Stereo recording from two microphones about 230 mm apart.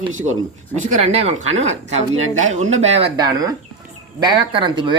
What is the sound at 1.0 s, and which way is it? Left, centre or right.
Speech, right.